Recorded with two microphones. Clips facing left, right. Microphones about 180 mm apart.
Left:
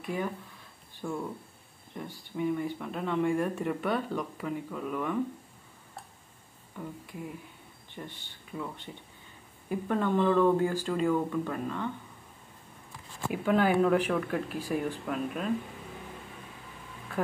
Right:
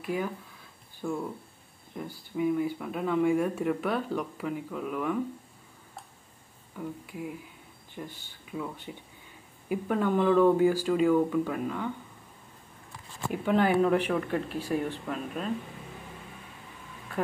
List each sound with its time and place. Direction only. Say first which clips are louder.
0.0 s speech: right 2 dB; 5° right (ahead or behind)
6.8 s speech: right 3 dB; 5° right (ahead or behind)
13.3 s speech: right 1 dB; 5° left (ahead or behind)